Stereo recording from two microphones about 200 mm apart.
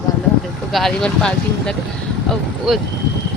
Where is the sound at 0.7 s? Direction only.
Centre (ahead or behind).